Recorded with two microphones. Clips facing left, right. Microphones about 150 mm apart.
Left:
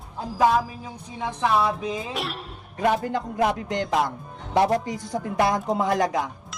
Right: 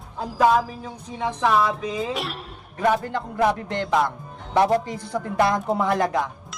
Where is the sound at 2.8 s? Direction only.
15° left (ahead or behind).